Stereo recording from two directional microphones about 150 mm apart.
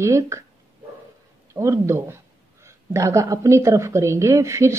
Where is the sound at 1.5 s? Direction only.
20° right (ahead or behind).